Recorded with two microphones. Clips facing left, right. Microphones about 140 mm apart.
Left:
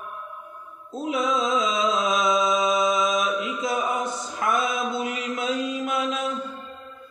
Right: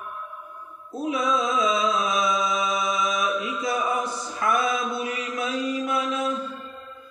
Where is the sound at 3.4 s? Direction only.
20° left (ahead or behind).